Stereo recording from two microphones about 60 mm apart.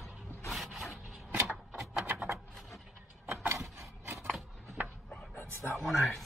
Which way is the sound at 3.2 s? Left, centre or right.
Right.